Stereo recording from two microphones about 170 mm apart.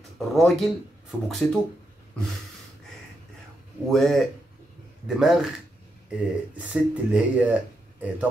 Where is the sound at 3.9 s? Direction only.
Centre (ahead or behind).